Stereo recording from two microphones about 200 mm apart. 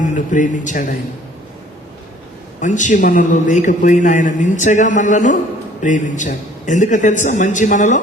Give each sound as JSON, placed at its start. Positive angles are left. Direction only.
{"t": 0.3, "sound": "a man's voice", "side_deg": 40}
{"t": 2.6, "sound": "a man's voice", "side_deg": 40}